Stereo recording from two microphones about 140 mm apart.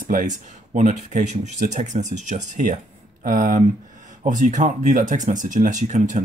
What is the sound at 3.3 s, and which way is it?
Speech, 75° right (ahead or behind).